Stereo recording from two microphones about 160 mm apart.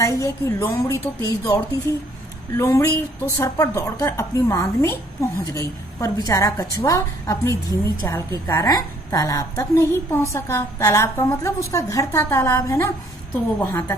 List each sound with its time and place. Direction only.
0.0 s a woman's voice: 20° left (ahead or behind)